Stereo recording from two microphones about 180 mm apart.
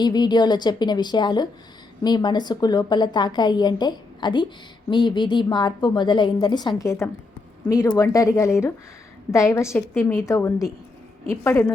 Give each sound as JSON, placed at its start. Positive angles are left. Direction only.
{"t": 0.0, "sound": "a woman's voice", "side_deg": 25}